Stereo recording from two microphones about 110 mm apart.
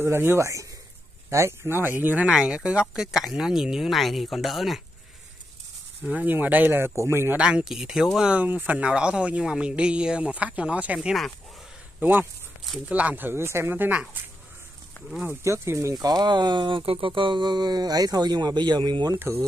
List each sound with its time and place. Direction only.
0.0 s speech: 20° right (ahead or behind); by 4.8 s centre (ahead or behind)
6.0 s speech: 15° right (ahead or behind)
7.3 s speech: 5° right (ahead or behind)
12.0 s speech: 15° right (ahead or behind)
15.2 s speech: 25° right (ahead or behind); by 19.1 s 40° right (ahead or behind)
19.1 s speech: 20° right (ahead or behind)